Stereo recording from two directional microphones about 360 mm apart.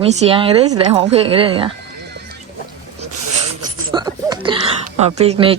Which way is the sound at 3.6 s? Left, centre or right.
Centre.